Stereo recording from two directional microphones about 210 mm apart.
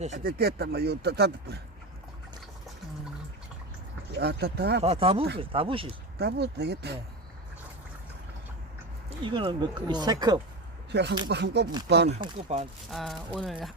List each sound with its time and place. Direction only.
0.0 s speech: 40° right (ahead or behind)
4.2 s speech: 50° right (ahead or behind)
4.8 s speech: 30° right (ahead or behind)
6.1 s speech: 50° right (ahead or behind)
9.2 s speech: 25° right (ahead or behind)
10.9 s speech: 55° right (ahead or behind)
12.0 s speech: 30° right (ahead or behind)
12.9 s speech: centre (ahead or behind)